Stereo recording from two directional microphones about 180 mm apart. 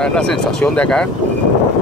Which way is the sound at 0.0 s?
5° left (ahead or behind).